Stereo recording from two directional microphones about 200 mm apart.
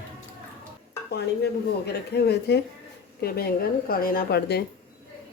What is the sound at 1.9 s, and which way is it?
A woman's voice, 55° left (ahead or behind).